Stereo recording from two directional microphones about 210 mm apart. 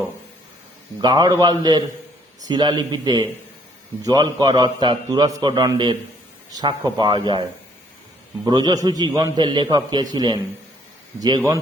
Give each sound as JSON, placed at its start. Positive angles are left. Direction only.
{"t": 1.0, "sound": "a man's voice", "side_deg": -20}
{"t": 8.4, "sound": "a man's voice", "side_deg": -20}